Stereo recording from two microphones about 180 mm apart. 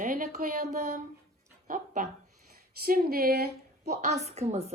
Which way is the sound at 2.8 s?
55° right (ahead or behind).